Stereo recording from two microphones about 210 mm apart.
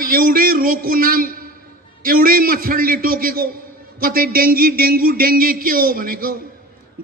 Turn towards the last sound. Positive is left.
turn(degrees=-45)  # may be behind; listen again after turning